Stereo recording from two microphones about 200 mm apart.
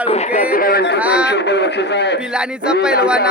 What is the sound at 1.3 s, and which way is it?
Speech, 60° left (ahead or behind).